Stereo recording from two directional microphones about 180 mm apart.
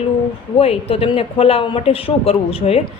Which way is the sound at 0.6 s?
35° left (ahead or behind).